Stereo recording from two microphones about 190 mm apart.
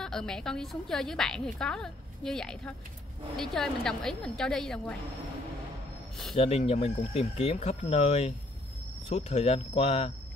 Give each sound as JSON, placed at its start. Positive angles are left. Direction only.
{"t": 0.0, "sound": "a woman's voice", "side_deg": 5}
{"t": 6.3, "sound": "speech", "side_deg": 35}